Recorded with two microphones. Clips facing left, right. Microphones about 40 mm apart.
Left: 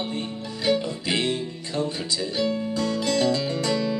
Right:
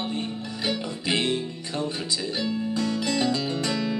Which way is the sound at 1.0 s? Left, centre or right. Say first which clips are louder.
Right 1 dB; right.